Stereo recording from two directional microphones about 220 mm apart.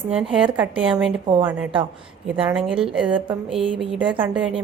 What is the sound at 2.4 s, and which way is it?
A woman's voice, 5° right (ahead or behind).